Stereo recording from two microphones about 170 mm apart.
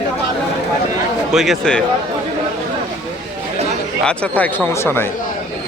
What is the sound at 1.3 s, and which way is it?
Speech, centre (ahead or behind).